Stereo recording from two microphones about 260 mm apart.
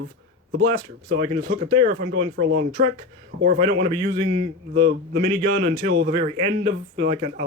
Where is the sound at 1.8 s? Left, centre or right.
Right.